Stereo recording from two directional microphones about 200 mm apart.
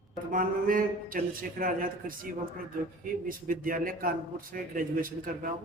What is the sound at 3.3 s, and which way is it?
A man's voice, 45° right (ahead or behind).